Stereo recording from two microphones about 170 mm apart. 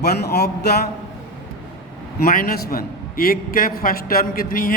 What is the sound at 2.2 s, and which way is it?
A man's voice, 60° left (ahead or behind).